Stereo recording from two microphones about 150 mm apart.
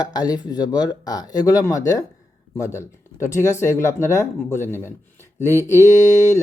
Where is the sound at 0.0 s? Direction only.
25° left (ahead or behind).